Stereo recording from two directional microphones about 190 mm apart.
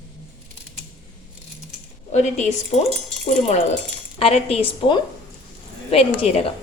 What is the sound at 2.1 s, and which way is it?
Speech, 35° left (ahead or behind).